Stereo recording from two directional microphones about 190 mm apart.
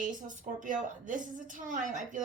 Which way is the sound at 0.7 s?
45° right (ahead or behind).